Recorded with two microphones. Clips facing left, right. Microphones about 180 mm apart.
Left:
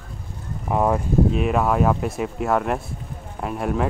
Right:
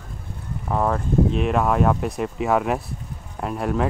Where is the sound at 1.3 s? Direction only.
Centre (ahead or behind).